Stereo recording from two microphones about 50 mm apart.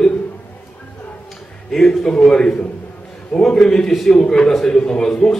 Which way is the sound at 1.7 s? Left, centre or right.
Centre.